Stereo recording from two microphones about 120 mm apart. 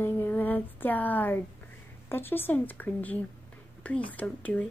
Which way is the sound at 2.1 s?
20° left (ahead or behind).